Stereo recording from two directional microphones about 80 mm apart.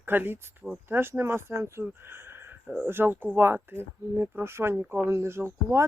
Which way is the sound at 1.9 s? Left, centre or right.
Right.